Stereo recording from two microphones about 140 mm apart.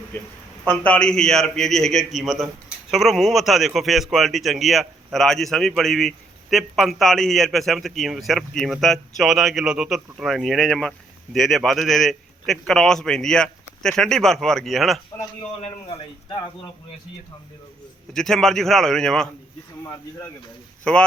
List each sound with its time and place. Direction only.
0.1 s a man's voice: 15° left (ahead or behind)
15.9 s speech: 35° left (ahead or behind)
18.1 s a man's voice: 5° left (ahead or behind)
19.8 s speech: 25° left (ahead or behind)
20.9 s speech: 5° left (ahead or behind)